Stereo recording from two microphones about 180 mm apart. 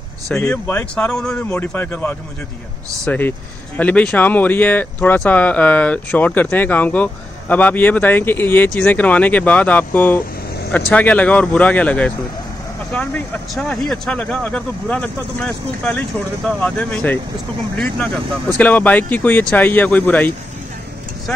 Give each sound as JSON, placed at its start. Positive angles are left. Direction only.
{"t": 0.3, "sound": "speech", "side_deg": 5}